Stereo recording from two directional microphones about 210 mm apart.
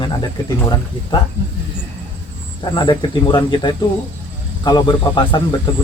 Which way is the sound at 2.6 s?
20° left (ahead or behind).